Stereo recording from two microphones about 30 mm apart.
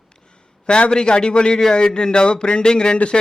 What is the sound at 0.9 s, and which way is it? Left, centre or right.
Speech, left.